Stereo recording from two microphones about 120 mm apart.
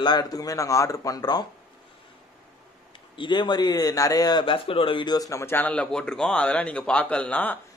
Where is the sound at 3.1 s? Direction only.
40° left (ahead or behind); by 7.6 s 15° left (ahead or behind).